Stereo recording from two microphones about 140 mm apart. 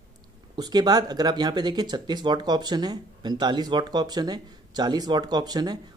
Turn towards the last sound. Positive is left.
turn(degrees=-30)  # may be behind; listen again after turning